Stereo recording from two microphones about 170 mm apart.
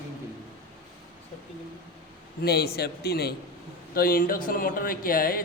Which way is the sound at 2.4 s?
70° left (ahead or behind).